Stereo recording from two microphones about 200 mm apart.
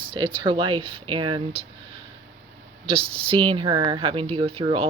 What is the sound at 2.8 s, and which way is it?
Speech, 25° right (ahead or behind).